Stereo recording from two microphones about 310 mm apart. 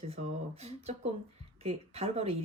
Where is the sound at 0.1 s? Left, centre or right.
Centre.